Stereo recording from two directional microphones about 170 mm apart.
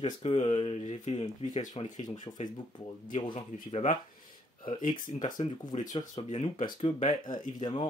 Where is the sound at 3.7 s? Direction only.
50° left (ahead or behind).